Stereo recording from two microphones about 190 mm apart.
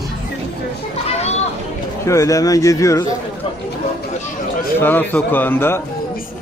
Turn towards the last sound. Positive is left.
turn(degrees=10)  # may be behind; listen again after turning